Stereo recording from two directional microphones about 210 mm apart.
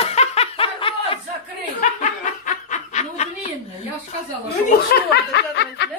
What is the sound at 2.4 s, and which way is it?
Snicker, 35° left (ahead or behind).